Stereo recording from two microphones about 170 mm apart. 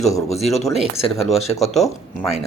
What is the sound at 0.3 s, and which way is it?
Speech, 40° left (ahead or behind).